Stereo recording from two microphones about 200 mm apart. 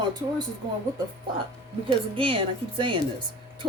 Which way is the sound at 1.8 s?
25° right (ahead or behind).